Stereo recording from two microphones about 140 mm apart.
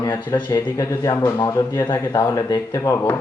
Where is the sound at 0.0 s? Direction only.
25° left (ahead or behind).